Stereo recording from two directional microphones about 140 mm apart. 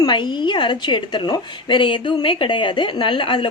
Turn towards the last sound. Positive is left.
turn(degrees=35)  # may be behind; listen again after turning